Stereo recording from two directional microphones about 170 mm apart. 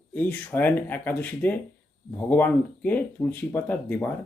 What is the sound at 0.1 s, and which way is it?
Speech, 10° left (ahead or behind).